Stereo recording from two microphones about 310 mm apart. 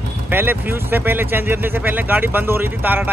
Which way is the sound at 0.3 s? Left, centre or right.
Centre.